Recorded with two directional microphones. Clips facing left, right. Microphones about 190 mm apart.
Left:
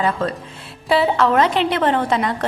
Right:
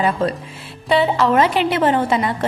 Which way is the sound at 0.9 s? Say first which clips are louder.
Even; centre (ahead or behind).